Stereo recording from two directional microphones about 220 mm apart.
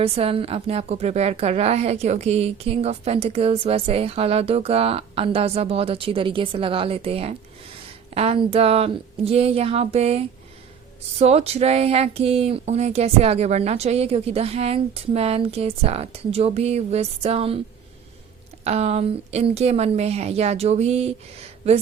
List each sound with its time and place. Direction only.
0.0 s a woman's voice: 25° right (ahead or behind)
18.6 s a woman's voice: 30° right (ahead or behind)